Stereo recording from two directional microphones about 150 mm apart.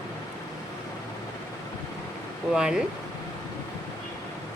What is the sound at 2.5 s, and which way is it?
Speech, 5° right (ahead or behind).